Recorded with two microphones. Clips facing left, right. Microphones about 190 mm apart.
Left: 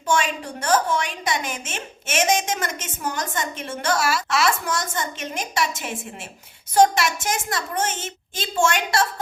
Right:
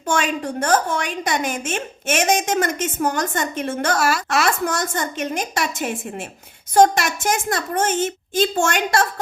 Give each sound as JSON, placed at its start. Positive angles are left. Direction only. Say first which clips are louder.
{"t": 0.1, "sound": "a woman's voice", "louder": "right 2 dB", "side_deg": -50}